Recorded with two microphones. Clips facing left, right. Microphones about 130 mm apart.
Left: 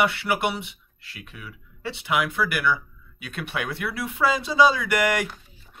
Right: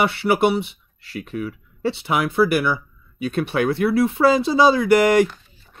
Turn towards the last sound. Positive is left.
turn(degrees=-30)  # may be behind; listen again after turning